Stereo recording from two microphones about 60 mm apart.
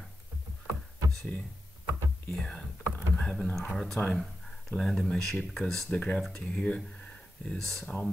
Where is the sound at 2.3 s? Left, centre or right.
Centre.